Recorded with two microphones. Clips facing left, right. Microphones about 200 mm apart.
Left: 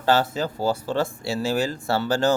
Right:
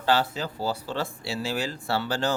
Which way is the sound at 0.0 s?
45° left (ahead or behind).